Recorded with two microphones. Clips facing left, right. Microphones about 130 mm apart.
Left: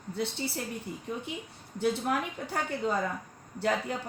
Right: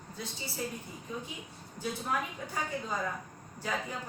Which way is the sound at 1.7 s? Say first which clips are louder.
Left 6 dB; 70° left (ahead or behind).